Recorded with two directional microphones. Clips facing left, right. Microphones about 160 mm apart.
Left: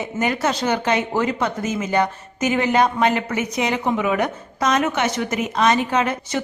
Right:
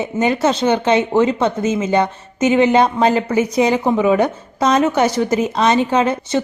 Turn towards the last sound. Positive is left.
turn(degrees=-30)  # may be behind; listen again after turning